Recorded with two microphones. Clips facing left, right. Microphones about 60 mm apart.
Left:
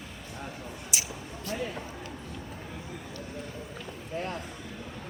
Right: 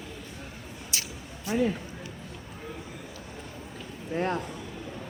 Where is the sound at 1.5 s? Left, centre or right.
Centre.